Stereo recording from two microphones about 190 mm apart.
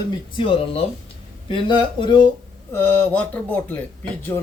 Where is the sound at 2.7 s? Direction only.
10° left (ahead or behind).